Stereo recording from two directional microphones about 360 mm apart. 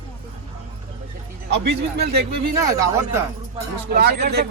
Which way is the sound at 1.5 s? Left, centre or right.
Right.